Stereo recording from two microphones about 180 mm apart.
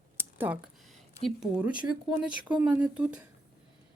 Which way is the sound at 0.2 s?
10° right (ahead or behind).